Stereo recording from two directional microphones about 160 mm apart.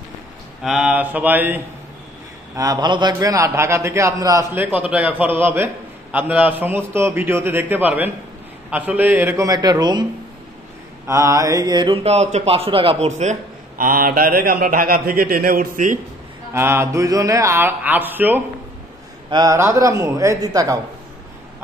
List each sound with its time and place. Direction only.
0.7 s a man's voice: 5° right (ahead or behind)
2.5 s a man's voice: 20° right (ahead or behind)
11.1 s speech: 20° right (ahead or behind); by 16.0 s 55° right (ahead or behind)
16.5 s a man's voice: 15° right (ahead or behind)